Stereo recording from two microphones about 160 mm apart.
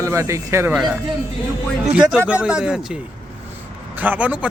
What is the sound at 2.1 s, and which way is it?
Speech, 5° right (ahead or behind).